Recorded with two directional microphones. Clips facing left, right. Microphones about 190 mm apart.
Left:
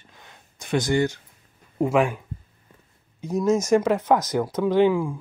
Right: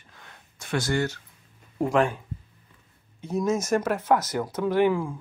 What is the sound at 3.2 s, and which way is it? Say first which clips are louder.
Speech: left 4 dB; 10° left (ahead or behind).